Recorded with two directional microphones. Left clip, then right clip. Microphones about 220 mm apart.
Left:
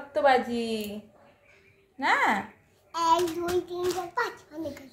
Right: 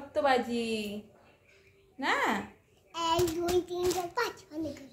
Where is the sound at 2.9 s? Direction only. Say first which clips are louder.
Left 6 dB; 20° left (ahead or behind).